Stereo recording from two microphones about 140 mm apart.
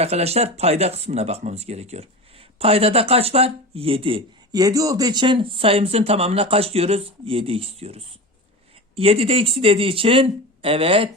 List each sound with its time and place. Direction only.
0.0 s speech: 45° right (ahead or behind)
4.5 s speech: 25° right (ahead or behind); by 11.1 s 40° right (ahead or behind)